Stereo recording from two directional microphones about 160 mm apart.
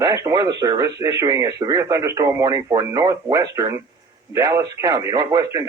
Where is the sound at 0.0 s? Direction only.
20° right (ahead or behind).